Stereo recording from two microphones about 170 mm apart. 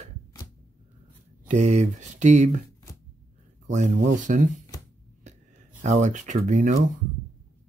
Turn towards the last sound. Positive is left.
turn(degrees=-45)  # may be behind; listen again after turning